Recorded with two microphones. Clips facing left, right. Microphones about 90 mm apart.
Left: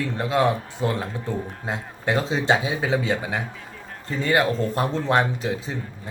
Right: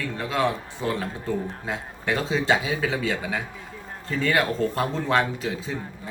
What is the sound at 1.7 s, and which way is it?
Speech, 25° left (ahead or behind).